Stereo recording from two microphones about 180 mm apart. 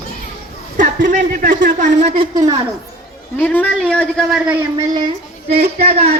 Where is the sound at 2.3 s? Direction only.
20° right (ahead or behind).